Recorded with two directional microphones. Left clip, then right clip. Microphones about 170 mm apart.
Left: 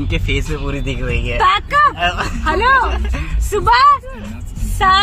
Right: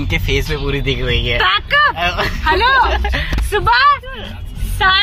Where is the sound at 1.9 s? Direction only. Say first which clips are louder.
Right 1 dB; 45° right (ahead or behind).